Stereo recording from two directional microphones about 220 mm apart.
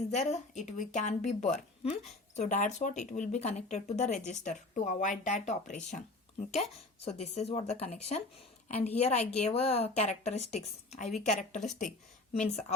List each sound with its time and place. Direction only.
0.1 s a woman's voice: 30° left (ahead or behind)